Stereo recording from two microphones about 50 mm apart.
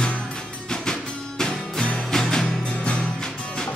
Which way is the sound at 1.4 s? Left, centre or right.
Centre.